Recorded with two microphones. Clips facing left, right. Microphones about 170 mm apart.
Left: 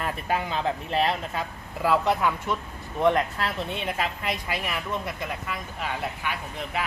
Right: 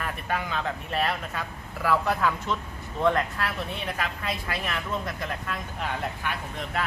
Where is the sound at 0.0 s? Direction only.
25° left (ahead or behind).